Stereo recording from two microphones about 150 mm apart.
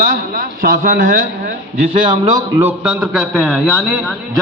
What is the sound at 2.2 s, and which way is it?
Speech, 25° right (ahead or behind).